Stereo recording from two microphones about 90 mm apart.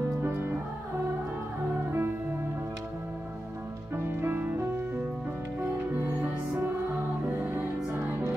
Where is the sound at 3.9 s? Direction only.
25° right (ahead or behind).